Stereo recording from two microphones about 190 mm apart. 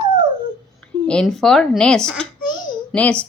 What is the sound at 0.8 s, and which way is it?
A woman's voice, 5° left (ahead or behind).